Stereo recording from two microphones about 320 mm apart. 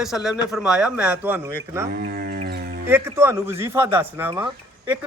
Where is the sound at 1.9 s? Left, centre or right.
Right.